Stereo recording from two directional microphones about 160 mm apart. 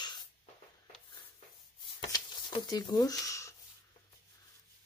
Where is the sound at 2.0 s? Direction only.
25° left (ahead or behind).